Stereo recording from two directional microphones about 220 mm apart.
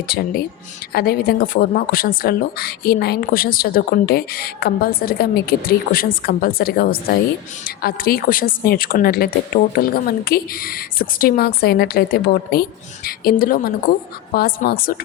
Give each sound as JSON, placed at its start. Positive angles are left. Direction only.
{"t": 0.1, "sound": "a woman's voice", "side_deg": 45}